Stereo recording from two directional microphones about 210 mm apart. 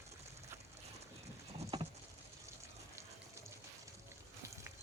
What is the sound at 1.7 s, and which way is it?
Patter, 20° right (ahead or behind).